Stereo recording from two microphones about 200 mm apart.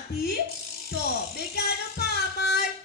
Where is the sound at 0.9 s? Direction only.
55° left (ahead or behind).